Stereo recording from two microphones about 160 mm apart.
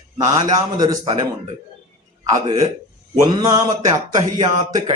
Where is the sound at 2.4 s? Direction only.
25° right (ahead or behind).